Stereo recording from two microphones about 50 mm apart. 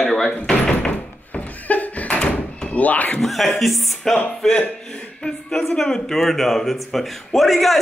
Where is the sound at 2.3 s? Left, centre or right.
Left.